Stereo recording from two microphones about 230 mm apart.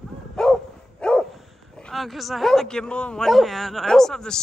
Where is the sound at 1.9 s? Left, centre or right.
Centre.